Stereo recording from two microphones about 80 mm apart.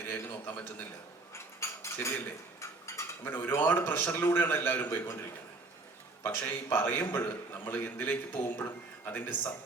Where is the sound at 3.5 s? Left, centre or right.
Left.